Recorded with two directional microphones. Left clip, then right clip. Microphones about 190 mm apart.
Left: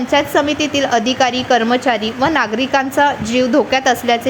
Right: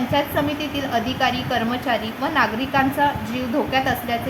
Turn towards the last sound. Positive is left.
turn(degrees=50)  # may be behind; listen again after turning